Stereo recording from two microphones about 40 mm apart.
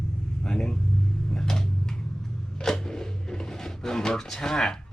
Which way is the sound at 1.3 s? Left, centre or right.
Centre.